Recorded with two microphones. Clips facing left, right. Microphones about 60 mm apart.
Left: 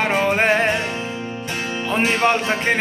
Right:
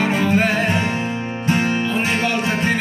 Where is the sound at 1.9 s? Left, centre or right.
Left.